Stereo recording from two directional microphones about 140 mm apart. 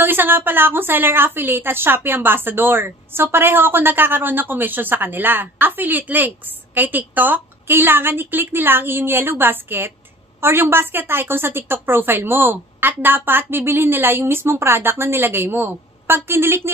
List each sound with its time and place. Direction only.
0.0 s a woman's voice: 15° right (ahead or behind)